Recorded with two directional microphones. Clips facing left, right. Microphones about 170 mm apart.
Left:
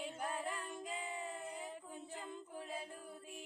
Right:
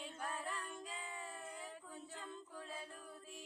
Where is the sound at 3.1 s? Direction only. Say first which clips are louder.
Left 3 dB; 15° left (ahead or behind).